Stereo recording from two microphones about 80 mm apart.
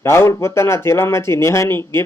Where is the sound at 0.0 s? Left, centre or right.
Left.